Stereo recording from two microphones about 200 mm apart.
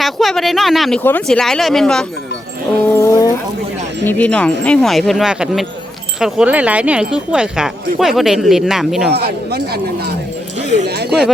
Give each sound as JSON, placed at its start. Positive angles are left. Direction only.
{"t": 0.0, "sound": "speech", "side_deg": 0}
{"t": 2.9, "sound": "a sound", "side_deg": 15}
{"t": 4.0, "sound": "speech", "side_deg": 10}
{"t": 9.1, "sound": "speech", "side_deg": -55}
{"t": 10.6, "sound": "a sound", "side_deg": -35}
{"t": 10.8, "sound": "speech", "side_deg": -55}